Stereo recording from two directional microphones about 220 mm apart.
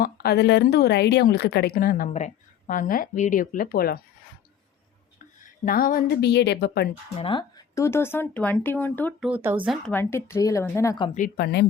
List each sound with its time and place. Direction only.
0.0 s a woman's voice: 45° left (ahead or behind)
5.4 s a woman's voice: 40° left (ahead or behind)
7.2 s speech: 20° left (ahead or behind)
9.2 s speech: 10° right (ahead or behind)
9.6 s speech: 5° left (ahead or behind)
11.1 s a woman's voice: 40° left (ahead or behind)